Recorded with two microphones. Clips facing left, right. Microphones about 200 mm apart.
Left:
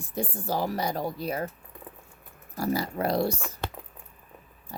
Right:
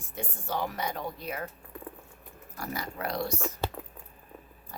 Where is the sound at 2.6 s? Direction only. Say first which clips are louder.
Left 8 dB; 30° left (ahead or behind).